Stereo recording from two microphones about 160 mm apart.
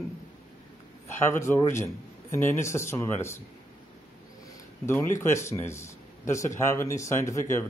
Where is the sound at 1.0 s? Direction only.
15° left (ahead or behind).